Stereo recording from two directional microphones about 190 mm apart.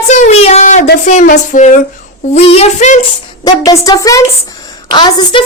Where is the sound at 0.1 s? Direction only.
35° left (ahead or behind).